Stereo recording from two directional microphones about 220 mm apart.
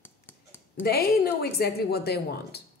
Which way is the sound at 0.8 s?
45° left (ahead or behind).